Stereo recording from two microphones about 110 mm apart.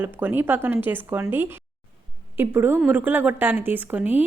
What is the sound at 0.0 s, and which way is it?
A woman's voice, 15° right (ahead or behind).